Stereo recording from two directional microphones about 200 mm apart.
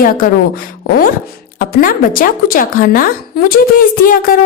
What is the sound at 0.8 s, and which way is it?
A woman's voice, 45° left (ahead or behind).